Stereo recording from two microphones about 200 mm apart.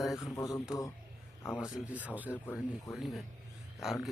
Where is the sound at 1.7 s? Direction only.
5° right (ahead or behind).